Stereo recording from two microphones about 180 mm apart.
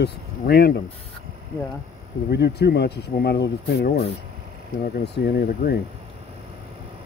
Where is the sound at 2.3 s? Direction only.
70° left (ahead or behind).